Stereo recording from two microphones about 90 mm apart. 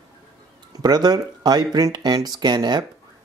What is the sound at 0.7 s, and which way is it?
Speech, 50° right (ahead or behind).